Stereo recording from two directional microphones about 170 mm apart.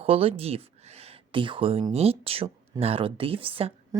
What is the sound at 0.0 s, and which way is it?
Speech, 35° right (ahead or behind).